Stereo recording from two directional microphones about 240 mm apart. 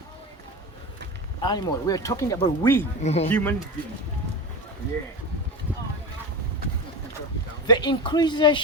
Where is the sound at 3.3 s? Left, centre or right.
Centre.